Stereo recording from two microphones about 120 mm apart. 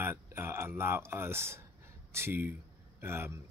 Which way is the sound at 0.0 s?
20° right (ahead or behind).